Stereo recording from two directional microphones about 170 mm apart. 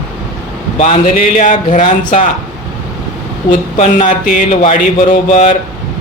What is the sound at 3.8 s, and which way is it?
Speech, 45° left (ahead or behind).